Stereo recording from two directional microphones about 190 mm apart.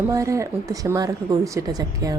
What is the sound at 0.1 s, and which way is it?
A woman's voice, 15° right (ahead or behind).